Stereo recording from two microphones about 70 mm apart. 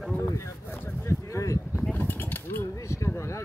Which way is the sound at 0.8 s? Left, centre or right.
Left.